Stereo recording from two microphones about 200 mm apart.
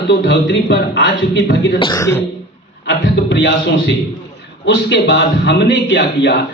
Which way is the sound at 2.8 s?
60° left (ahead or behind).